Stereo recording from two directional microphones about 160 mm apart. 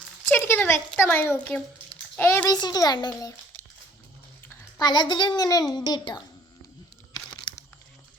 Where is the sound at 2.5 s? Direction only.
25° left (ahead or behind).